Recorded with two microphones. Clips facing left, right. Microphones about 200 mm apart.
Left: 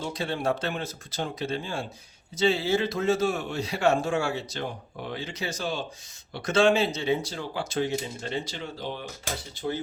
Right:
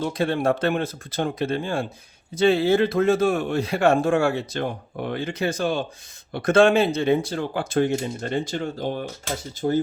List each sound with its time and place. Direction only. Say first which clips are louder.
0.0 s speech: right 7 dB; 55° right (ahead or behind)